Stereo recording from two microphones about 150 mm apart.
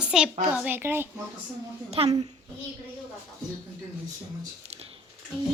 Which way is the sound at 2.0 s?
40° right (ahead or behind).